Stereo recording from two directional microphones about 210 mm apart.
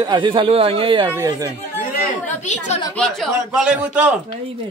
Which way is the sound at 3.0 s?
Centre (ahead or behind).